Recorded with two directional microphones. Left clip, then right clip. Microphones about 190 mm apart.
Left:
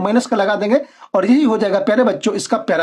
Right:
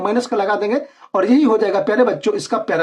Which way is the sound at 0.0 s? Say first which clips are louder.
Left 2 dB; 35° left (ahead or behind).